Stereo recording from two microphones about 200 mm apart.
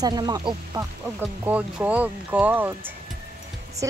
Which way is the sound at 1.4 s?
10° right (ahead or behind).